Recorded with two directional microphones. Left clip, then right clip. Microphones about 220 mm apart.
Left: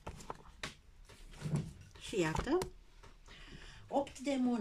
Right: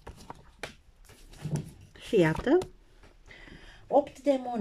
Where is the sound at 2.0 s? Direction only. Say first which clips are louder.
Right 11 dB; 35° right (ahead or behind).